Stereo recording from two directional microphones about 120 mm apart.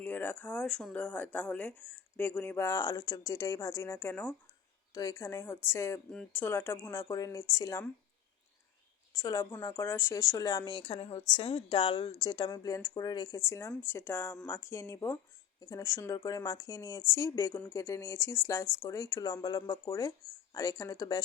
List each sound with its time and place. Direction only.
0.0 s speech: 15° left (ahead or behind)
4.9 s speech: 25° left (ahead or behind)
6.1 s speech: 5° left (ahead or behind)
6.4 s speech: 20° left (ahead or behind)
9.1 s speech: 25° left (ahead or behind)
10.9 s a woman's voice: 50° left (ahead or behind); by 21.2 s 30° left (ahead or behind)